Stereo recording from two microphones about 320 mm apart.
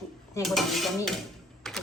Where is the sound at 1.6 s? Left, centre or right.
Centre.